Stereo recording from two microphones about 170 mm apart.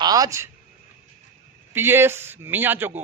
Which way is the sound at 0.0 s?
20° right (ahead or behind).